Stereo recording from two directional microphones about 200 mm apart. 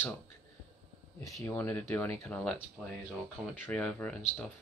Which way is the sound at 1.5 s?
10° left (ahead or behind).